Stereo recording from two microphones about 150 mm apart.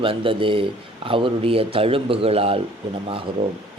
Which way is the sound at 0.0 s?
35° right (ahead or behind).